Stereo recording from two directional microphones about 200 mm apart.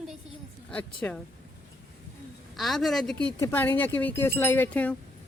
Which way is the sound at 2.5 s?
Centre (ahead or behind).